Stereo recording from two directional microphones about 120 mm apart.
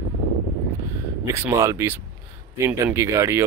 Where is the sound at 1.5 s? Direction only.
25° right (ahead or behind).